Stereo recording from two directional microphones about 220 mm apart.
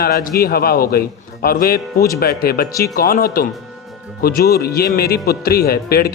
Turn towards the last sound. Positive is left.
turn(degrees=45)  # may be behind; listen again after turning